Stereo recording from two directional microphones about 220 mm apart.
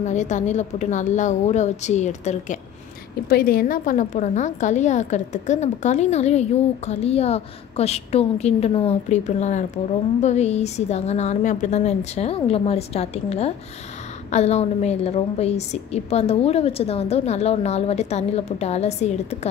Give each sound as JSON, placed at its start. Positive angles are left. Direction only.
{"t": 0.0, "sound": "a woman's voice", "side_deg": 35}